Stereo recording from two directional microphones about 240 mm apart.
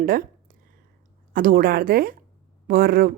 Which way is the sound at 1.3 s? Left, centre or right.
Right.